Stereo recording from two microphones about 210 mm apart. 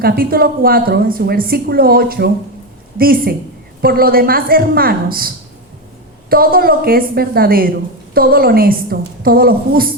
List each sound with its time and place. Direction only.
0.0 s a woman's voice: 45° right (ahead or behind)
6.3 s a woman's voice: 45° right (ahead or behind)